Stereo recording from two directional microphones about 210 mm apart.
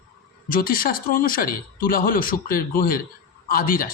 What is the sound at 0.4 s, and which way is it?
A man's voice, 45° left (ahead or behind).